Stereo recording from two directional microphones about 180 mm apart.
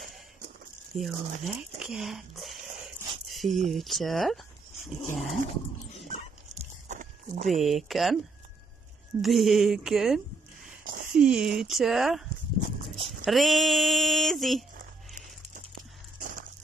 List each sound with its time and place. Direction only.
0.9 s speech: centre (ahead or behind)
1.8 s dog: centre (ahead or behind)
6.0 s dog: 40° right (ahead or behind)
7.4 s speech: centre (ahead or behind)
9.2 s speech: centre (ahead or behind)
10.8 s a sound: 55° right (ahead or behind)
11.1 s speech: 5° right (ahead or behind)
16.2 s a sound: 50° right (ahead or behind)